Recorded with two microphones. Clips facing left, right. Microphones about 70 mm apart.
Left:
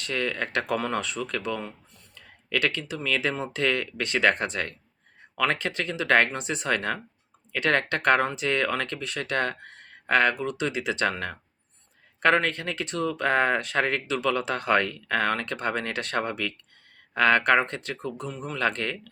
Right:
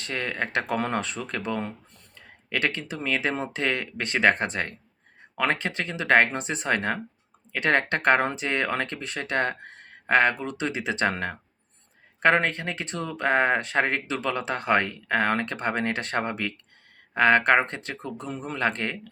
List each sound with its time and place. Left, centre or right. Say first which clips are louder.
0.0 s speech: left 1 dB; right